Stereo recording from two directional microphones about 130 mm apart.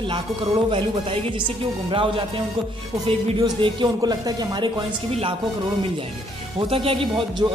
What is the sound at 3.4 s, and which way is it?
A man's voice, 35° right (ahead or behind).